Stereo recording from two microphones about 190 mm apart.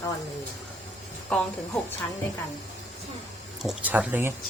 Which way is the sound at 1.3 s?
5° left (ahead or behind).